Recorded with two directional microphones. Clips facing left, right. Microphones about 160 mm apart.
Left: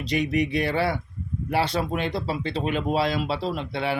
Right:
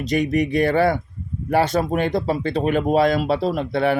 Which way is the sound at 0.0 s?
45° right (ahead or behind).